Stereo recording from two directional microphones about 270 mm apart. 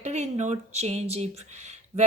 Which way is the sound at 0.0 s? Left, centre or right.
Right.